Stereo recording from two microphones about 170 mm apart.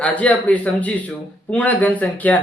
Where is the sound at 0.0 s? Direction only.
10° left (ahead or behind).